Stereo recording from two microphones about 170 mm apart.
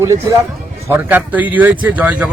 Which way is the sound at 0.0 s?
15° right (ahead or behind).